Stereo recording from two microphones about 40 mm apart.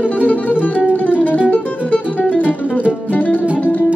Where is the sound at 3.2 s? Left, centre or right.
Left.